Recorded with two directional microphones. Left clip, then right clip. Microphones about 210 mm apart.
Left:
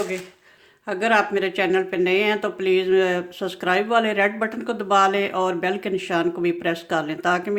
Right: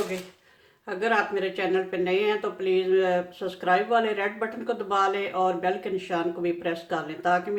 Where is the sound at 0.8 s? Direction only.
45° left (ahead or behind).